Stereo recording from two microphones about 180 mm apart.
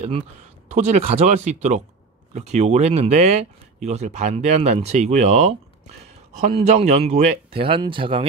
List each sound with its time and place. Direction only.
0.7 s speech: 35° right (ahead or behind)